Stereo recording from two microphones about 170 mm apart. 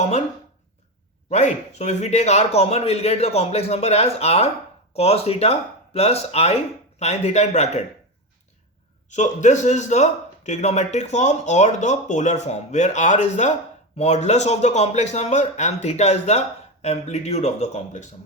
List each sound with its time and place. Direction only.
0.0 s speech: 40° left (ahead or behind)
1.3 s a man's voice: 45° left (ahead or behind)
9.1 s a man's voice: 45° left (ahead or behind)